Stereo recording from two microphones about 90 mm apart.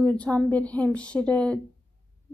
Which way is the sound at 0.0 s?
15° left (ahead or behind).